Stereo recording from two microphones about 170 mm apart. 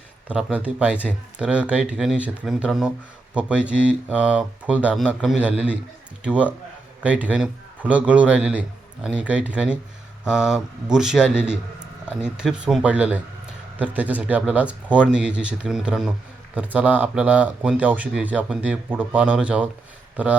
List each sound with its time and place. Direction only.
0.3 s speech: 5° right (ahead or behind)